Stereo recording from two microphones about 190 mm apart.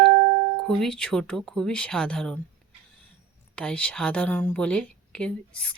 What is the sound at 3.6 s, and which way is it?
Speech, 5° left (ahead or behind).